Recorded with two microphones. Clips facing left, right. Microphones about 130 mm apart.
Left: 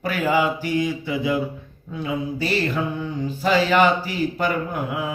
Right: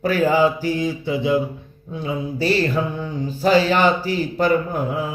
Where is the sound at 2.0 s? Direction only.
35° right (ahead or behind).